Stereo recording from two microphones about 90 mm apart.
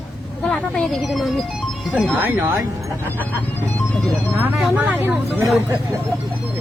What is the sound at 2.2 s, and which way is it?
Speech, 25° right (ahead or behind).